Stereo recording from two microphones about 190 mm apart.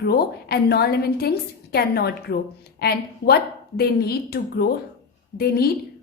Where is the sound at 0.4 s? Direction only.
55° left (ahead or behind).